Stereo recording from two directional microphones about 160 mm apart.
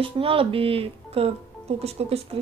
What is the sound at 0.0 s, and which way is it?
Speech, 35° right (ahead or behind).